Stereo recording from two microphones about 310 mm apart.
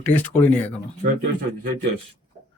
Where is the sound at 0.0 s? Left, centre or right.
Centre.